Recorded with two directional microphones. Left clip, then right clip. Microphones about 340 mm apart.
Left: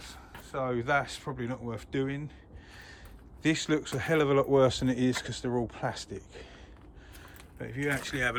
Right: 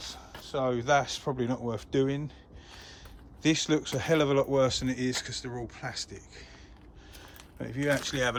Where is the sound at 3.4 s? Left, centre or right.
Centre.